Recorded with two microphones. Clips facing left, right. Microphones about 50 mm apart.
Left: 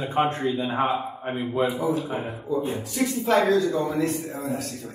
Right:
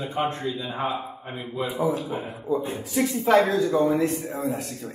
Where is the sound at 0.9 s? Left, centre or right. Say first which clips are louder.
Left 4 dB; centre.